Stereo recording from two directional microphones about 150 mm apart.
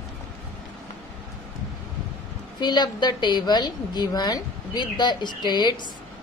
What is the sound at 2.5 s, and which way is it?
A woman's voice, 30° left (ahead or behind).